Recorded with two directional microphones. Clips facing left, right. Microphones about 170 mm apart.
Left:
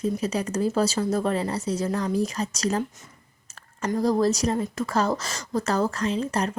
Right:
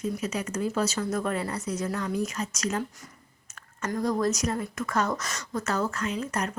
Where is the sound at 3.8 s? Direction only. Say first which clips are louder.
Left 4 dB; 30° left (ahead or behind).